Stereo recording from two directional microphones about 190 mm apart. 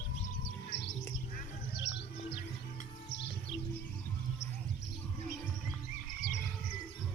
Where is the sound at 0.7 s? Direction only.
65° left (ahead or behind).